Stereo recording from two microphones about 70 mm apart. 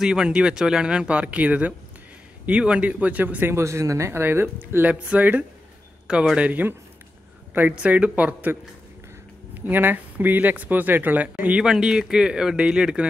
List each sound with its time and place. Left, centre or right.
0.0 s speech: centre
3.5 s speech: right
7.7 s speech: centre
11.6 s speech: centre